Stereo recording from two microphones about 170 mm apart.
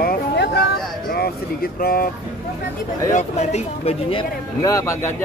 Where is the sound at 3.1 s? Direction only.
40° left (ahead or behind).